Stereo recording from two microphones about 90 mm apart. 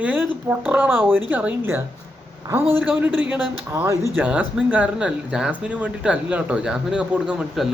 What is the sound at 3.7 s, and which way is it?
Speech, 35° right (ahead or behind).